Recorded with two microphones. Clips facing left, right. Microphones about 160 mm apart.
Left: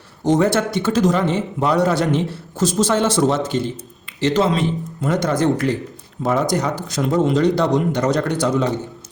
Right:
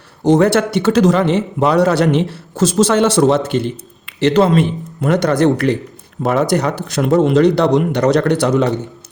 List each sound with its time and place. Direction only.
0.3 s a man's voice: 70° right (ahead or behind)